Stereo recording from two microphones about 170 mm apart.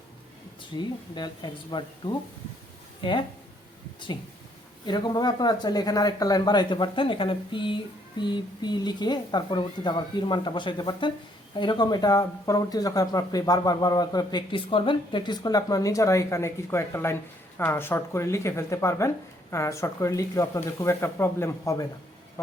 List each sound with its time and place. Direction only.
0.8 s speech: 25° left (ahead or behind)
4.9 s speech: 25° left (ahead or behind)